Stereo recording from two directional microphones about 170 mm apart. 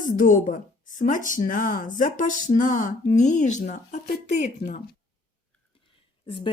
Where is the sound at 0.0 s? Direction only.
50° left (ahead or behind).